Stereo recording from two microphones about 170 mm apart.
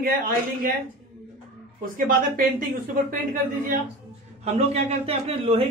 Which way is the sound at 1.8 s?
55° right (ahead or behind).